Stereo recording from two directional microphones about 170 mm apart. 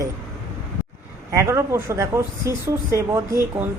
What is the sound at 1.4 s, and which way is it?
Speech, 15° right (ahead or behind).